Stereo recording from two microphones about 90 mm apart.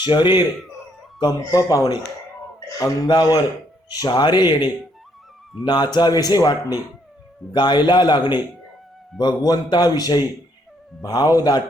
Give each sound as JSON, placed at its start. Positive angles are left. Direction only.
{"t": 0.0, "sound": "a man's voice", "side_deg": 55}
{"t": 1.4, "sound": "a man's voice", "side_deg": 35}
{"t": 2.6, "sound": "a sound", "side_deg": 40}
{"t": 3.1, "sound": "a man's voice", "side_deg": 45}